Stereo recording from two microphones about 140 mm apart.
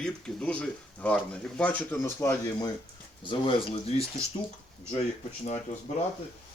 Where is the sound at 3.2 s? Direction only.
35° left (ahead or behind).